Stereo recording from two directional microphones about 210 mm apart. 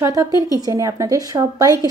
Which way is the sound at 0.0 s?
15° right (ahead or behind).